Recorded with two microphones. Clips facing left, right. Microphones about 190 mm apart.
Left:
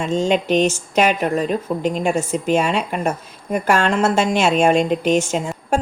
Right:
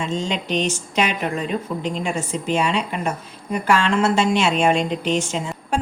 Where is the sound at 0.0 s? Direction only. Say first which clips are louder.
Left 6 dB; 50° left (ahead or behind).